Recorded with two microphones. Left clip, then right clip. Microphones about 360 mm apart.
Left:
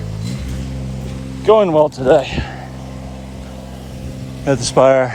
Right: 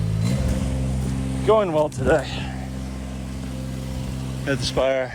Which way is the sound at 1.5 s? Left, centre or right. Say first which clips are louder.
Left 8 dB; left.